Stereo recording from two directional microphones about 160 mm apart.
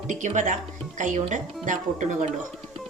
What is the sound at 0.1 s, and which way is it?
Speech, 50° right (ahead or behind).